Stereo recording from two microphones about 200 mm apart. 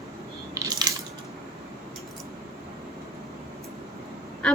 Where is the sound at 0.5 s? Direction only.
15° right (ahead or behind).